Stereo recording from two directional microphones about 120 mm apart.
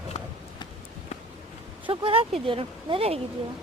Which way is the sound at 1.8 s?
50° right (ahead or behind).